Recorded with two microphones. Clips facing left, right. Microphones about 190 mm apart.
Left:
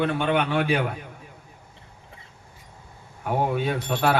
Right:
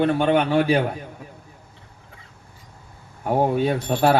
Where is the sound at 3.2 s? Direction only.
40° right (ahead or behind).